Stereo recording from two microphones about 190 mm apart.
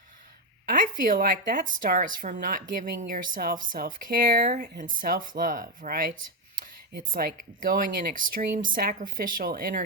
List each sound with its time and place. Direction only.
0.6 s speech: 45° right (ahead or behind)